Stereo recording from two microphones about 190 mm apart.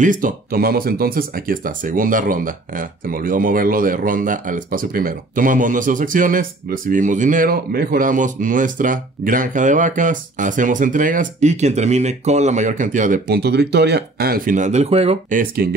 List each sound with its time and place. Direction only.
0.0 s speech: 45° right (ahead or behind)